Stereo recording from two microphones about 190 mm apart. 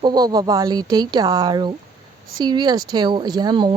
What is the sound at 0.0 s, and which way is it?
Speech, 20° right (ahead or behind).